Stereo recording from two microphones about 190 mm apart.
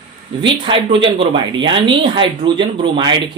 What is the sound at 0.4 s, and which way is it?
Speech, 25° right (ahead or behind).